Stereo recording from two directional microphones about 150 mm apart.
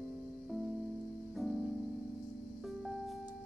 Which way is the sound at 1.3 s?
Centre (ahead or behind).